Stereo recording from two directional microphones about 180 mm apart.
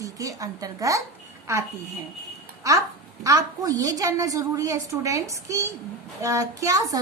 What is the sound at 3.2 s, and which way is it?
A woman's voice, 20° right (ahead or behind).